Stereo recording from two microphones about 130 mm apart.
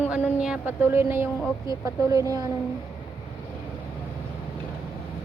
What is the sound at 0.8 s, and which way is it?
A woman's voice, 15° right (ahead or behind).